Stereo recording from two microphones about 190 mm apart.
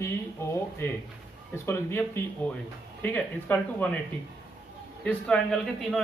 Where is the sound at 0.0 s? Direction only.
15° left (ahead or behind).